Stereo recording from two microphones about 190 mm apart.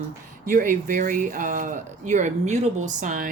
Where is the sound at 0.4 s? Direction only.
45° right (ahead or behind).